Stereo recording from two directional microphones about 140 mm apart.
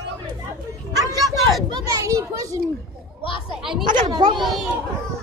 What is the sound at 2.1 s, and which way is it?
Children playing, 25° right (ahead or behind).